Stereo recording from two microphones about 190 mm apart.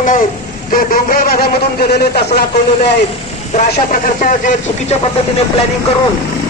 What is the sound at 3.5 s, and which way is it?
A man's voice, 45° left (ahead or behind).